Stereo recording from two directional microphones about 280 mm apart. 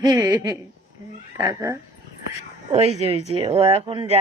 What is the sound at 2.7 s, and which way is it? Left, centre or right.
Speech, right.